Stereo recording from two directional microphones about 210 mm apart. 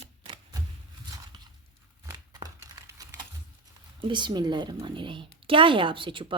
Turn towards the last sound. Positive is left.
turn(degrees=-25)  # may be behind; listen again after turning